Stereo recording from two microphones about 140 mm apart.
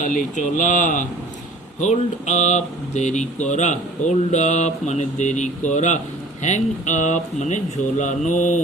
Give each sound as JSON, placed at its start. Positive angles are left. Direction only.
{"t": 0.0, "sound": "speech", "side_deg": 65}